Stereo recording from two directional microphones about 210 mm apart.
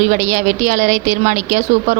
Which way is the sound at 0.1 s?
35° right (ahead or behind).